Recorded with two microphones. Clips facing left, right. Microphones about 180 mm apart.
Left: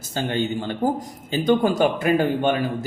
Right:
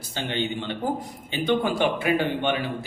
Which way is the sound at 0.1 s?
45° left (ahead or behind).